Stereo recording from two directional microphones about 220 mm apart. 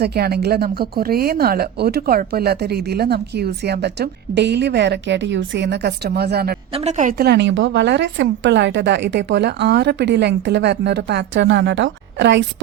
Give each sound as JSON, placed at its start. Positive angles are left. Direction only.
{"t": 0.0, "sound": "speech", "side_deg": -45}
{"t": 6.7, "sound": "speech", "side_deg": -30}